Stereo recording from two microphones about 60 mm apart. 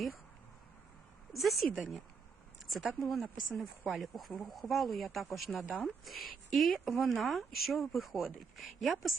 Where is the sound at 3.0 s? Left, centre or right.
Centre.